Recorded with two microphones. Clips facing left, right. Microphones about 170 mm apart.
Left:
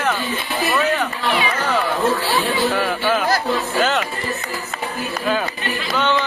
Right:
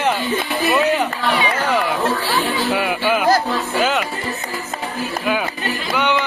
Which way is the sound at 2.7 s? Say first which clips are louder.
Right 1 dB; 10° right (ahead or behind).